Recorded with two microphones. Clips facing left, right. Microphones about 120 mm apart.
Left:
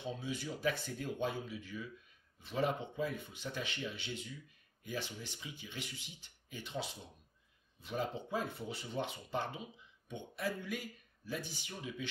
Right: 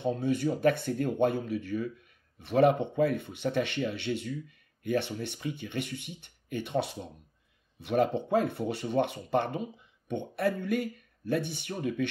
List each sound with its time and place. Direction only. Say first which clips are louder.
0.0 s speech: right 13 dB; 55° right (ahead or behind)